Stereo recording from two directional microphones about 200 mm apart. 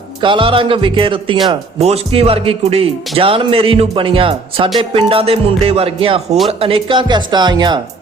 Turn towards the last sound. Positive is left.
turn(degrees=-20)  # may be behind; listen again after turning